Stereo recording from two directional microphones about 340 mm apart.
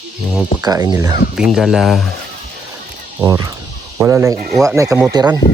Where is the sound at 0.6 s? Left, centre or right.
Centre.